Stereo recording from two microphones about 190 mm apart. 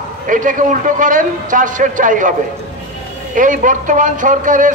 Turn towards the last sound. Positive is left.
turn(degrees=-45)  # may be behind; listen again after turning